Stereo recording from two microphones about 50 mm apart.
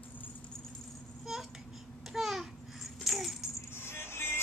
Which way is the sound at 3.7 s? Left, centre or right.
Left.